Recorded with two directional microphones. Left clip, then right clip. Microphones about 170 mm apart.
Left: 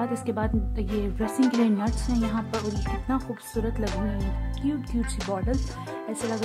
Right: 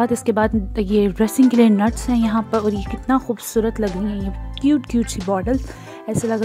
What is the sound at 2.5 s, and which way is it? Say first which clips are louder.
Speech: right 12 dB; centre (ahead or behind).